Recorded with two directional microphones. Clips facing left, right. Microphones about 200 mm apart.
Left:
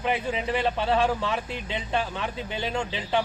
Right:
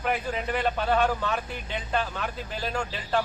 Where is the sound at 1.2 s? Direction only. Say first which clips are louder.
Left 1 dB; 25° left (ahead or behind).